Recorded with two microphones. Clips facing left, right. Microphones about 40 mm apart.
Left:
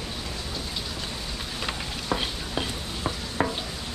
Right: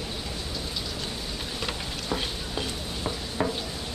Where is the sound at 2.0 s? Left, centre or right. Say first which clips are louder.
Left 2 dB; left.